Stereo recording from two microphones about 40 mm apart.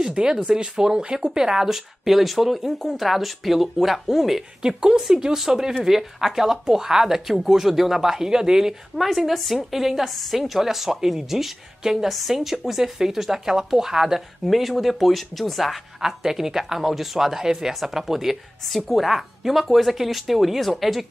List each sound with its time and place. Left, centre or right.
0.0 s a sound: centre
0.5 s a woman's voice: centre
8.9 s a woman's voice: centre
14.4 s speech: centre
16.0 s a woman's voice: centre